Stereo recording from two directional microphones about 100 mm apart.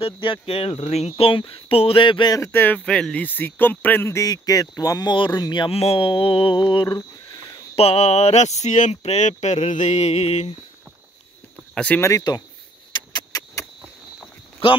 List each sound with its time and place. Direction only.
0.0 s speech: 60° left (ahead or behind)
2.3 s speech: 30° left (ahead or behind)
2.6 s speech: 15° left (ahead or behind); by 5.1 s 40° left (ahead or behind)
5.1 s speech: 50° left (ahead or behind)
5.7 s mantra: 85° left; by 7.0 s 55° left (ahead or behind)
7.7 s speech: 90° left
11.7 s speech: 10° left (ahead or behind)
12.0 s speech: 35° left (ahead or behind)
12.9 s a sound: 45° left (ahead or behind)